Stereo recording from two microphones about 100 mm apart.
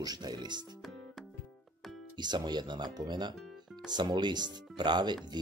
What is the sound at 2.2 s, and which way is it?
Speech, 45° right (ahead or behind).